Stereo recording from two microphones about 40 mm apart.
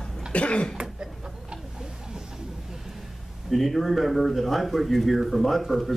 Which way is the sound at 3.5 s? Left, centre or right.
Centre.